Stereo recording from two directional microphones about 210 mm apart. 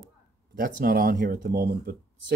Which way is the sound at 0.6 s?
45° right (ahead or behind).